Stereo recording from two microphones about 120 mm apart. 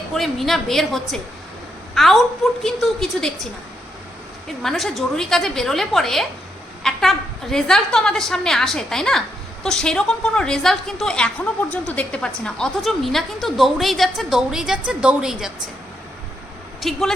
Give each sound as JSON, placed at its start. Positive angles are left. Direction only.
{"t": 0.1, "sound": "a woman's voice", "side_deg": 0}
{"t": 4.6, "sound": "a woman's voice", "side_deg": 0}
{"t": 16.8, "sound": "a woman's voice", "side_deg": 0}